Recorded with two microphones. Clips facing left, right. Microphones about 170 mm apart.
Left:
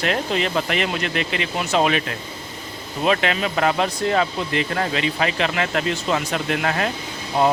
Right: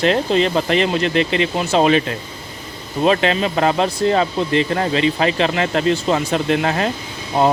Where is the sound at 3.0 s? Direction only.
30° right (ahead or behind).